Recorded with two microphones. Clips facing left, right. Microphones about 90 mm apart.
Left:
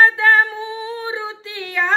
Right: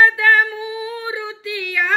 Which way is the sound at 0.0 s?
30° left (ahead or behind).